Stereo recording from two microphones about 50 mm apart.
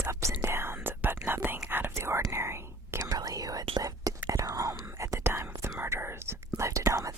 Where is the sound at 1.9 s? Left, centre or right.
Right.